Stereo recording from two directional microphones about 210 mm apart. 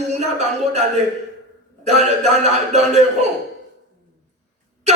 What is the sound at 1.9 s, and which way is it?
A man's voice, 30° right (ahead or behind).